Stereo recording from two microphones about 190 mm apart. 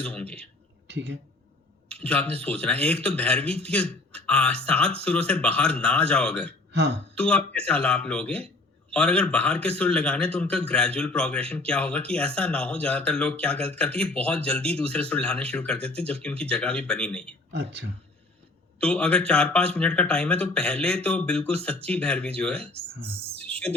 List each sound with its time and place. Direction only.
0.0 s speech: 5° left (ahead or behind)
1.9 s speech: 5° left (ahead or behind)
17.5 s speech: 60° right (ahead or behind)
18.8 s speech: 5° left (ahead or behind)
22.7 s speech: 10° right (ahead or behind)